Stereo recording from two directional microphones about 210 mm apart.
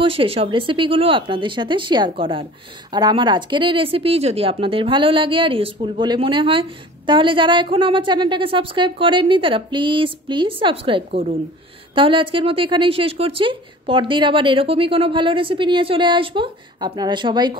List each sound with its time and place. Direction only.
0.0 s speech: 25° right (ahead or behind)
11.1 s speech: 35° right (ahead or behind)
11.9 s speech: 25° right (ahead or behind)